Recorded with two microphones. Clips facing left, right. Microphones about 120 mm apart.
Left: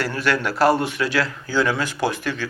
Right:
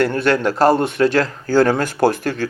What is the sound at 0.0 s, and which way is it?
Speech, 45° right (ahead or behind).